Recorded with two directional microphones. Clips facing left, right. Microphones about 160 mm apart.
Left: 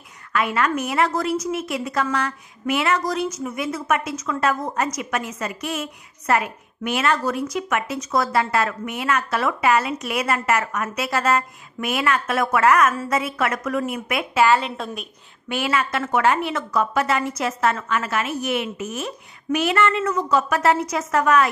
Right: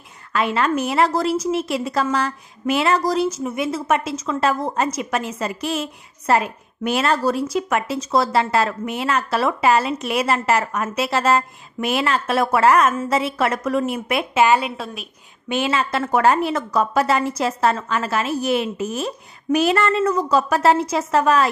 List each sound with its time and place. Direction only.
0.3 s a woman's voice: 30° right (ahead or behind)